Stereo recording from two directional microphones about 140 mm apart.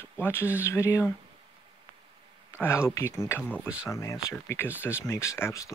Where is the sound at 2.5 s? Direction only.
20° left (ahead or behind).